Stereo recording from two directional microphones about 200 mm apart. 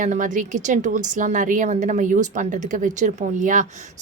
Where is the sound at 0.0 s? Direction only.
40° right (ahead or behind).